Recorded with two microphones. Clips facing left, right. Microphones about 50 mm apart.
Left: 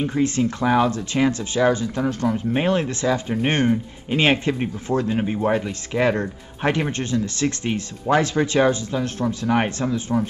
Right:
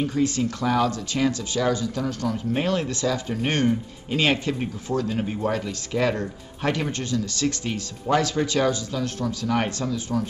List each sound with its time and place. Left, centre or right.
0.0 s speech: left